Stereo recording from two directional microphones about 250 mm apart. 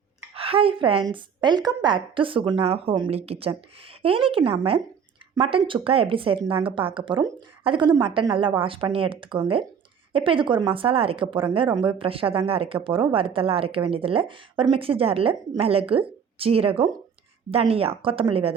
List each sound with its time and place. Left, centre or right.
0.3 s speech: right